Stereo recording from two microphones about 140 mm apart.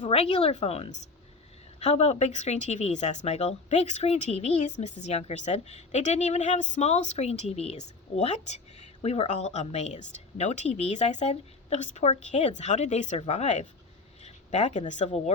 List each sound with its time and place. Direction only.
0.1 s a woman's voice: 45° left (ahead or behind)